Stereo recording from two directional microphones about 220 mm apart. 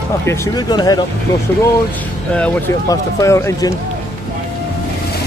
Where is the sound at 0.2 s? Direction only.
10° left (ahead or behind).